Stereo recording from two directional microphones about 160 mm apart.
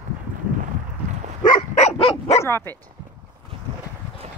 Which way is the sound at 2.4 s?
15° left (ahead or behind).